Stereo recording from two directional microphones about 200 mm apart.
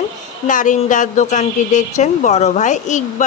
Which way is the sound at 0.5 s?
40° left (ahead or behind).